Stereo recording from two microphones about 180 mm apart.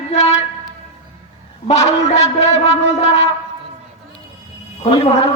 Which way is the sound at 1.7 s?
40° left (ahead or behind).